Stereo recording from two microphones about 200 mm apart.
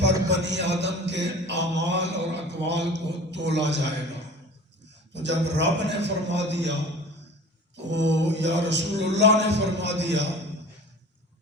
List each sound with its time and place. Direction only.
0.0 s mantra: 60° right (ahead or behind)
5.1 s mantra: 60° right (ahead or behind)
7.8 s mantra: 60° right (ahead or behind)